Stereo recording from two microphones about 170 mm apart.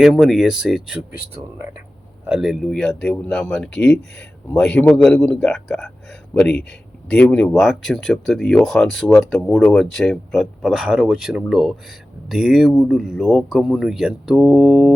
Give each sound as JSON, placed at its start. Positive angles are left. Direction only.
{"t": 0.0, "sound": "speech", "side_deg": 0}
{"t": 2.2, "sound": "speech", "side_deg": -5}